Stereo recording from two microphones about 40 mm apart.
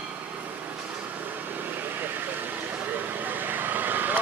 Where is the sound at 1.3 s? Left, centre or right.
Right.